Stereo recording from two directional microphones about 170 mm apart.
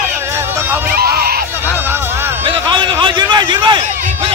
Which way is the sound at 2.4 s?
30° right (ahead or behind).